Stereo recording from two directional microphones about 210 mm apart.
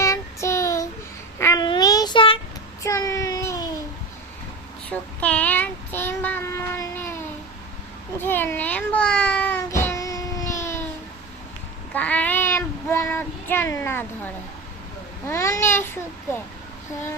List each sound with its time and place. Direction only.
0.0 s child singing: 15° left (ahead or behind)
4.9 s child singing: 5° left (ahead or behind)
8.2 s child singing: 10° left (ahead or behind)
11.9 s child singing: 5° left (ahead or behind)
15.3 s babbling: 15° left (ahead or behind)